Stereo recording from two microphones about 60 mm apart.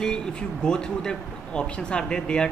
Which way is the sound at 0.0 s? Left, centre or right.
Centre.